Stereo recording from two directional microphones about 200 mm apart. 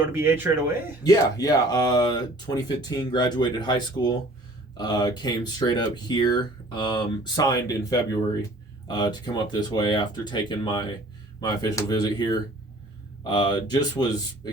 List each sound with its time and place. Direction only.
0.1 s speech: 10° right (ahead or behind)
1.0 s speech: 20° left (ahead or behind)